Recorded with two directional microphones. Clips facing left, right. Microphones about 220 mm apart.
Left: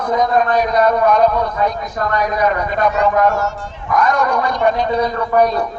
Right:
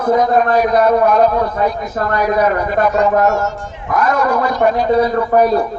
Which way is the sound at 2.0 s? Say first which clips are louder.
Right 2 dB; 45° right (ahead or behind).